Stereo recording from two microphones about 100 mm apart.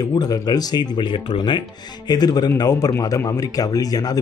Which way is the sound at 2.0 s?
45° left (ahead or behind).